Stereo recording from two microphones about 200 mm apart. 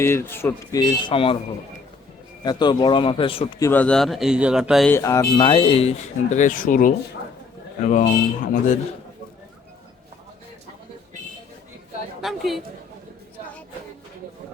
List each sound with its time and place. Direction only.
0.0 s speech: 10° left (ahead or behind)
2.4 s speech: 20° left (ahead or behind)
3.6 s speech: 10° left (ahead or behind)
4.9 s speech: 15° left (ahead or behind)
6.3 s speech: 40° left (ahead or behind)
12.2 s chatter: centre (ahead or behind)